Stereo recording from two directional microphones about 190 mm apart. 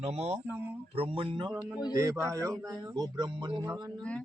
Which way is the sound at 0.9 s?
30° right (ahead or behind).